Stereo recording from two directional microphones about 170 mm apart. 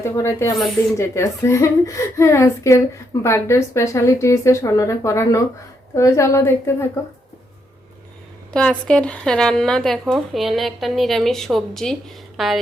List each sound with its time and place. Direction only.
0.0 s a woman's voice: 15° left (ahead or behind)
8.5 s speech: 5° left (ahead or behind)